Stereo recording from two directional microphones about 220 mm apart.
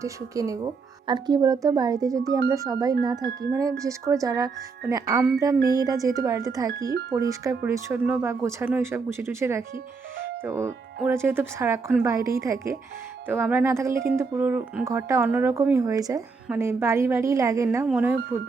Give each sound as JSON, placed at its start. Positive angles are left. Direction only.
{"t": 0.0, "sound": "speech", "side_deg": -15}